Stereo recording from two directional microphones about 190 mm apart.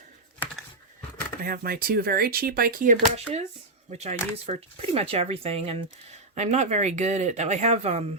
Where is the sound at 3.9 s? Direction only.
35° right (ahead or behind).